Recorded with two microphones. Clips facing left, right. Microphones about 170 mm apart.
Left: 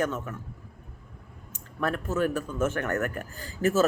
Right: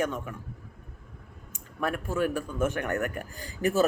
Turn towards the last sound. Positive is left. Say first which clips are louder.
# left 2 dB
turn(degrees=-15)  # may be behind; listen again after turning